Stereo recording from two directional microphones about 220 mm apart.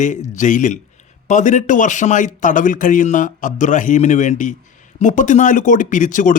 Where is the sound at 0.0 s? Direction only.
35° left (ahead or behind).